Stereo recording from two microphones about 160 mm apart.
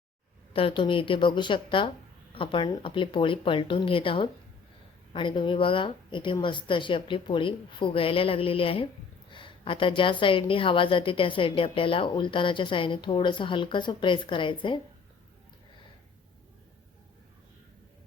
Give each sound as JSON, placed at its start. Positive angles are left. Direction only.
{"t": 0.5, "sound": "a woman's voice", "side_deg": 30}